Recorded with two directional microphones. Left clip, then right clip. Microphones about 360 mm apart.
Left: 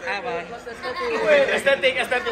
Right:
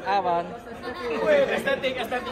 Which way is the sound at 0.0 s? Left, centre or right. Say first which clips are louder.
Right 3 dB; centre.